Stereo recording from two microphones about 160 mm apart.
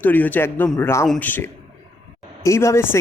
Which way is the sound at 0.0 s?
10° left (ahead or behind).